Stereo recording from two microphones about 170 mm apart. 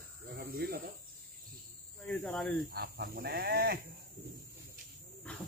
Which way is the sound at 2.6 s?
60° right (ahead or behind).